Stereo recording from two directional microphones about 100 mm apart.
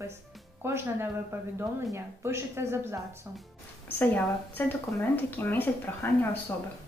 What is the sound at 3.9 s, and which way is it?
Speech, 20° left (ahead or behind).